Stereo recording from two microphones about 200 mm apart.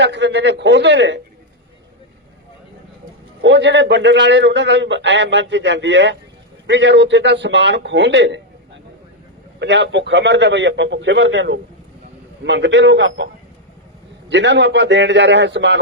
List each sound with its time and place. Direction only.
0.0 s a man's voice: 60° right (ahead or behind)
3.4 s a man's voice: 60° right (ahead or behind)
9.6 s a man's voice: 60° right (ahead or behind)